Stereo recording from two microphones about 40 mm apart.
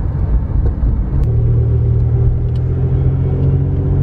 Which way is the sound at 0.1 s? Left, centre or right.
Centre.